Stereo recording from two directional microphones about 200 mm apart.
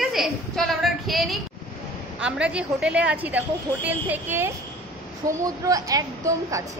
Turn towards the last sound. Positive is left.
turn(degrees=-15)  # may be behind; listen again after turning